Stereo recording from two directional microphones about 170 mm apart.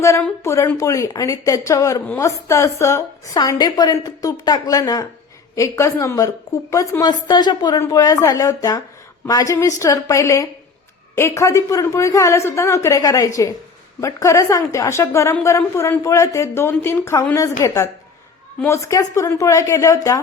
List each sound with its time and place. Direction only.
0.0 s a woman's voice: 15° left (ahead or behind)
18.6 s a woman's voice: 15° left (ahead or behind)